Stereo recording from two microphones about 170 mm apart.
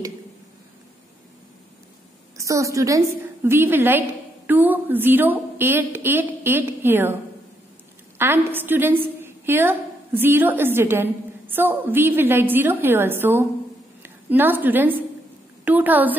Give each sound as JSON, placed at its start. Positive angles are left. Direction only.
{"t": 2.3, "sound": "a woman's voice", "side_deg": -20}
{"t": 8.2, "sound": "a woman's voice", "side_deg": -15}